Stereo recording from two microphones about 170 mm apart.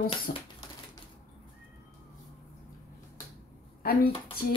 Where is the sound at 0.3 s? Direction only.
70° left (ahead or behind).